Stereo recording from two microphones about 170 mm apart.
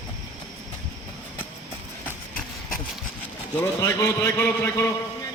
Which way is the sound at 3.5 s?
20° left (ahead or behind).